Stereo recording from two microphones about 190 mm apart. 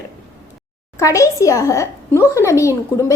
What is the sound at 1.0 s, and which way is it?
A child's voice, 15° left (ahead or behind).